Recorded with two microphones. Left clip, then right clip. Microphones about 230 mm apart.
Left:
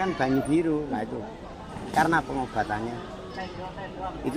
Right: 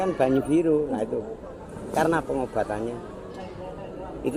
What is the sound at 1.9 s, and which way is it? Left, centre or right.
Speech, left.